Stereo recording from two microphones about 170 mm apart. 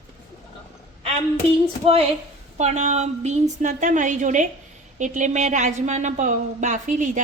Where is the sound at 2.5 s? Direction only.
45° right (ahead or behind).